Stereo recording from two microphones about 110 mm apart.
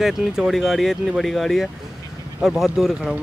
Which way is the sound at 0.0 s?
Centre (ahead or behind).